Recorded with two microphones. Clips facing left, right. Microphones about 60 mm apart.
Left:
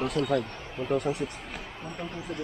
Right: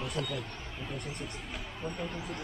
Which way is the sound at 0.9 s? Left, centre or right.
Left.